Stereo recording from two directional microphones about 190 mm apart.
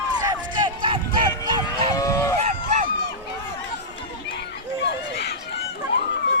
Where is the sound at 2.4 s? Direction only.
35° right (ahead or behind).